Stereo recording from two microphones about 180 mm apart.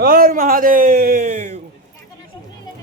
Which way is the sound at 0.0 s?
55° right (ahead or behind).